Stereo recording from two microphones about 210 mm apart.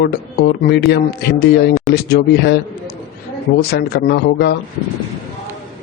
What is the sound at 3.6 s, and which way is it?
Speech, 50° left (ahead or behind).